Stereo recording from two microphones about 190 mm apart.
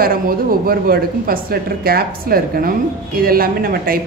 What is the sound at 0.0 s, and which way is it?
A woman's voice, 50° right (ahead or behind).